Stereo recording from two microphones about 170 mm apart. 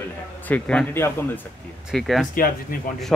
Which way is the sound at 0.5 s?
5° left (ahead or behind).